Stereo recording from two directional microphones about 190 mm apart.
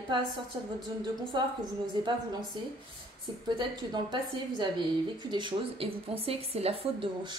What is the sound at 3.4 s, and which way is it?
A woman's voice, 25° right (ahead or behind).